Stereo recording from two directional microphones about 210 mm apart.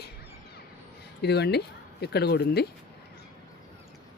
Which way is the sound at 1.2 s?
50° left (ahead or behind).